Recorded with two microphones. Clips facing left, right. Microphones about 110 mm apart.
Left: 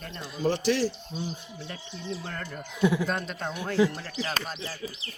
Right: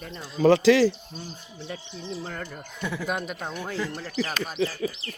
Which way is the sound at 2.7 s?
10° left (ahead or behind).